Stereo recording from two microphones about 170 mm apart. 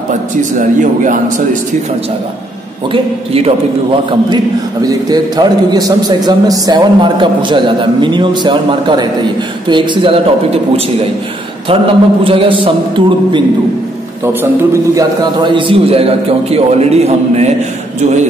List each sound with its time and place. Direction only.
0.6 s a man's voice: 50° right (ahead or behind)
2.9 s a man's voice: 35° right (ahead or behind)
4.8 s a man's voice: 25° right (ahead or behind)
11.7 s a man's voice: 30° right (ahead or behind)
14.2 s a man's voice: 15° right (ahead or behind)
15.4 s a man's voice: 30° right (ahead or behind)